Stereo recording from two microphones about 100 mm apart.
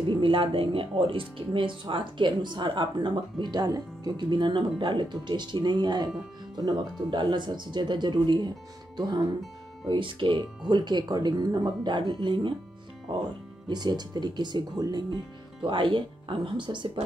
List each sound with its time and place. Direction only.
0.1 s speech: 60° right (ahead or behind)
9.8 s speech: 55° right (ahead or behind)
13.7 s speech: 45° right (ahead or behind)
15.6 s speech: 55° right (ahead or behind)